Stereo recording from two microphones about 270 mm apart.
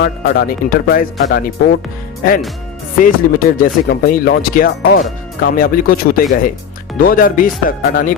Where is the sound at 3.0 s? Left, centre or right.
Left.